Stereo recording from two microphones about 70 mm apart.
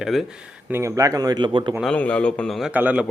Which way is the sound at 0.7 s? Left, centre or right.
Right.